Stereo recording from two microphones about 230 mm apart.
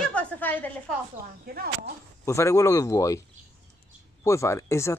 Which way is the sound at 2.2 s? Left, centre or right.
Centre.